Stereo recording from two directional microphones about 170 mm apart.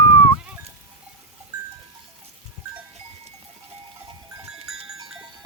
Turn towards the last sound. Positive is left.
turn(degrees=-5)  # may be behind; listen again after turning